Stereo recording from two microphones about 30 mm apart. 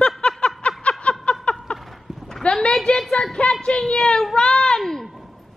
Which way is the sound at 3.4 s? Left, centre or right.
Left.